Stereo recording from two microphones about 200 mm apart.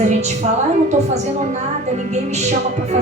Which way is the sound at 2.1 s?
35° right (ahead or behind).